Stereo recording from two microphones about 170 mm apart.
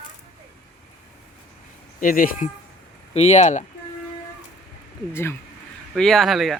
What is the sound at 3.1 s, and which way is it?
Speech, 40° left (ahead or behind).